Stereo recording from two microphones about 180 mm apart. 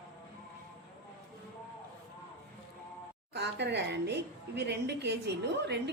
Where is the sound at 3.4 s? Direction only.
70° right (ahead or behind).